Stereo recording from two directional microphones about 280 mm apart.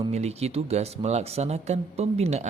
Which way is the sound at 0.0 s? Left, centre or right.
Right.